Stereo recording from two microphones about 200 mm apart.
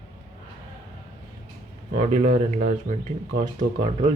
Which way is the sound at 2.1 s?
30° right (ahead or behind).